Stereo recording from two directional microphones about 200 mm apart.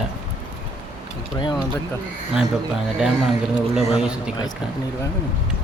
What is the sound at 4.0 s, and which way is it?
Speech, 5° right (ahead or behind).